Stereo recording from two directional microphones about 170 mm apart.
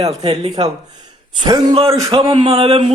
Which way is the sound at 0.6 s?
25° right (ahead or behind).